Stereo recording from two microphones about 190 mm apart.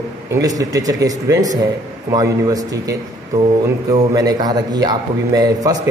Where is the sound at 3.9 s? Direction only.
20° right (ahead or behind).